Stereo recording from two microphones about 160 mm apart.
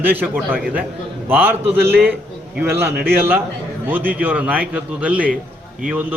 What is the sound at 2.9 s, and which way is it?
Speech, 75° right (ahead or behind).